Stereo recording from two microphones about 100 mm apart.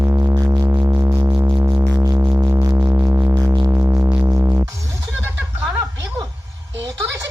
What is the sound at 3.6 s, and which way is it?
Sine wave, 30° right (ahead or behind).